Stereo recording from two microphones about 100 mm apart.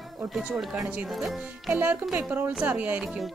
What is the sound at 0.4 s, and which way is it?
Speech, 5° right (ahead or behind).